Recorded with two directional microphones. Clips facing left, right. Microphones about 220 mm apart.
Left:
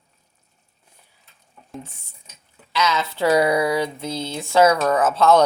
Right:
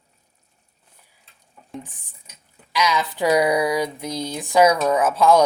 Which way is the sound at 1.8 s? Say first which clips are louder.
Left 1 dB; 15° right (ahead or behind).